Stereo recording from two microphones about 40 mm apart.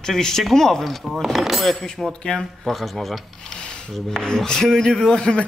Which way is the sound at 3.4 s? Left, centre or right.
Left.